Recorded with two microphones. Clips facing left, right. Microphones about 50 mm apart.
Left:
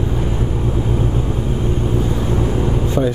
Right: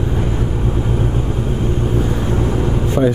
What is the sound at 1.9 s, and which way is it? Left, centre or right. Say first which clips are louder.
Vehicle: right 1 dB; right.